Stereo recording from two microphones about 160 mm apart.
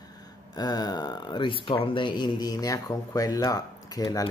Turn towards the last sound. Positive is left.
turn(degrees=25)  # may be behind; listen again after turning